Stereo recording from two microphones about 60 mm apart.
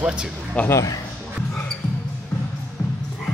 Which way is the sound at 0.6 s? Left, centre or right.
Left.